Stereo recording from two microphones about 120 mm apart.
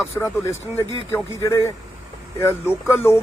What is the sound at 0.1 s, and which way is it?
A man's voice, 30° left (ahead or behind).